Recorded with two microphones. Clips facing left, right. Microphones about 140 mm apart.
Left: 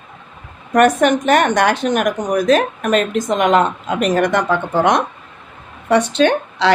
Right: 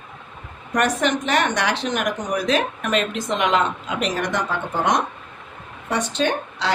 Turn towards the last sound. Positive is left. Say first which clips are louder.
# left 8 dB
turn(degrees=70)  # may be behind; listen again after turning